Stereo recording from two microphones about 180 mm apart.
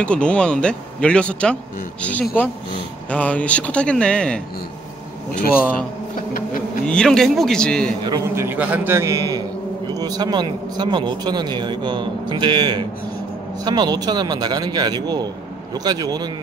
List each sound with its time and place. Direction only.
0.0 s speech: 5° left (ahead or behind)
6.9 s a man's voice: 5° left (ahead or behind)
8.0 s speech: 20° right (ahead or behind)
8.5 s a man's voice: 10° right (ahead or behind)